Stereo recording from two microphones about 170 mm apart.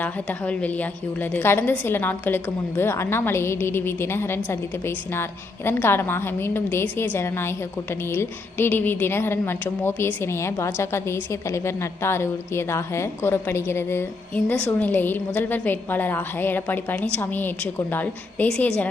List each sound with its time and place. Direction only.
0.0 s a woman's voice: 10° left (ahead or behind)